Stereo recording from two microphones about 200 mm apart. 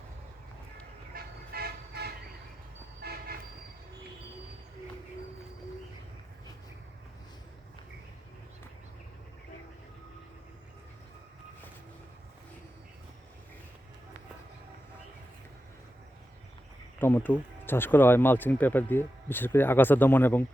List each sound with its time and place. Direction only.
1.1 s vehicle: 50° right (ahead or behind)
3.0 s toot: 50° right (ahead or behind)
17.0 s speech: 10° left (ahead or behind)